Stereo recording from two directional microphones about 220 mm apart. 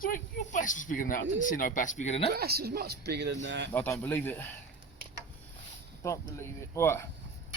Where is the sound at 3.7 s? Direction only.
10° left (ahead or behind).